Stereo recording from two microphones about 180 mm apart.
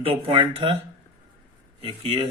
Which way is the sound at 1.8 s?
30° right (ahead or behind).